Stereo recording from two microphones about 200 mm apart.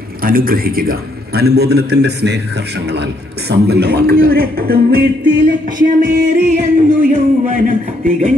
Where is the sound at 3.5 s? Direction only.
55° right (ahead or behind).